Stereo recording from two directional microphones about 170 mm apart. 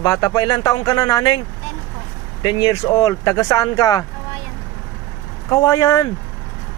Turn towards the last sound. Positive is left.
turn(degrees=20)  # may be behind; listen again after turning